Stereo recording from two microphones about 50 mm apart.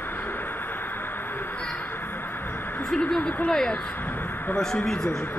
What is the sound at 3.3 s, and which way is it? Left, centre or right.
Speech, left.